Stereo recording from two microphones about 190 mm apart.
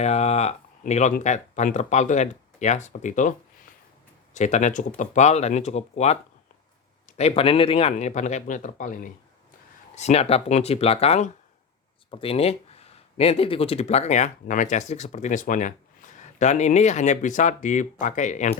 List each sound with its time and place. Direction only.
0.0 s speech: 35° left (ahead or behind)
4.4 s speech: 40° left (ahead or behind)
7.2 s speech: 30° left (ahead or behind)